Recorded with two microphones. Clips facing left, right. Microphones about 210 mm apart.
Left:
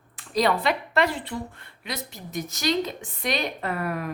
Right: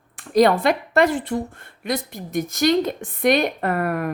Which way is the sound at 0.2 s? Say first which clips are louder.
Right 7 dB; 50° right (ahead or behind).